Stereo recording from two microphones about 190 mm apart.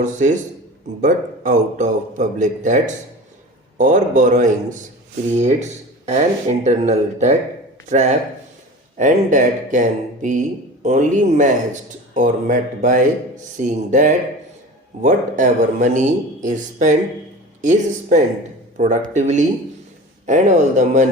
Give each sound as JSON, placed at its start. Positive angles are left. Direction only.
{"t": 0.0, "sound": "speech", "side_deg": -40}